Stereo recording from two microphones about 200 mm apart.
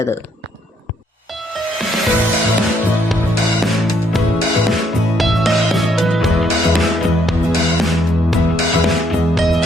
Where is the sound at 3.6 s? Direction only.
Centre (ahead or behind).